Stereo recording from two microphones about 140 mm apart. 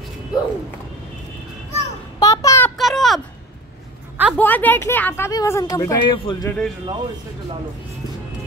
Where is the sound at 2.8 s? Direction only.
Centre (ahead or behind).